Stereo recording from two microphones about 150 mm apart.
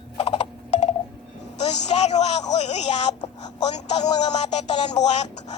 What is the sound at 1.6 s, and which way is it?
A man's voice, 45° left (ahead or behind).